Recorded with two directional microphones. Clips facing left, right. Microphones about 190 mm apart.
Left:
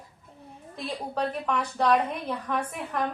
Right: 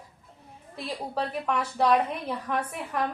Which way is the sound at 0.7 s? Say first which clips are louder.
Even; 5° right (ahead or behind).